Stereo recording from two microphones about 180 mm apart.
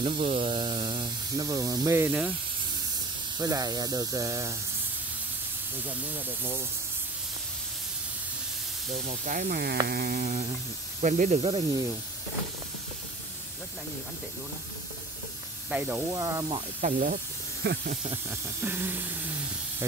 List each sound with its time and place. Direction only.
0.0 s speech: 30° right (ahead or behind); by 2.3 s 10° right (ahead or behind)
3.3 s speech: 20° right (ahead or behind)
5.9 s hiss: 10° right (ahead or behind)
8.9 s speech: 40° right (ahead or behind); by 9.8 s 55° right (ahead or behind)
9.8 s a sound: 55° right (ahead or behind)
11.0 s speech: 40° right (ahead or behind)
15.7 s hiss: 10° right (ahead or behind)
16.8 s speech: 50° right (ahead or behind)
17.6 s a sound: 65° right (ahead or behind)
18.1 s hiss: 10° right (ahead or behind)